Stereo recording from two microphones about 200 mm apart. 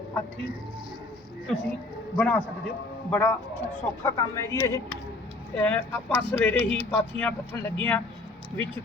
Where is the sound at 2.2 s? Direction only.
5° left (ahead or behind).